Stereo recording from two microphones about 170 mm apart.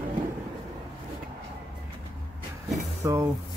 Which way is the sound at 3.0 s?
15° right (ahead or behind).